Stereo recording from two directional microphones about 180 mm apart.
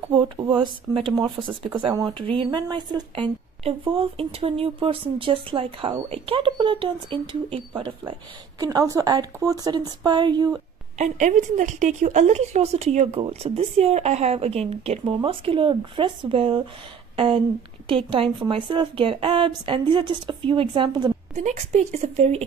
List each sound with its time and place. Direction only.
0.1 s speech: 25° right (ahead or behind)
11.0 s a woman's voice: 40° right (ahead or behind)
17.8 s speech: 30° right (ahead or behind)
21.4 s a woman's voice: 40° right (ahead or behind)